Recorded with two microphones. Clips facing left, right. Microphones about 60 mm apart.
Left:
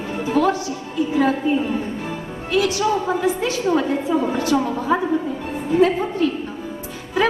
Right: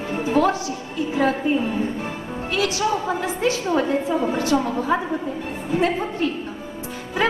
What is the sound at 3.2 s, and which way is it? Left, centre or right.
A woman's voice, right.